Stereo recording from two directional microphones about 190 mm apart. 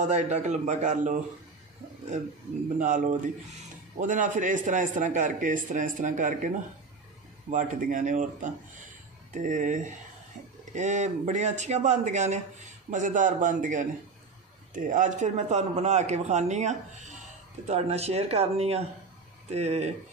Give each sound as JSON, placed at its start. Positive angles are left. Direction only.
{"t": 0.0, "sound": "a man's voice", "side_deg": -40}
{"t": 2.8, "sound": "a man's voice", "side_deg": -40}
{"t": 7.5, "sound": "a man's voice", "side_deg": -45}